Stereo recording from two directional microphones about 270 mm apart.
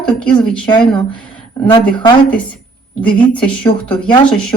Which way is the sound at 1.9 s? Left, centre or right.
Centre.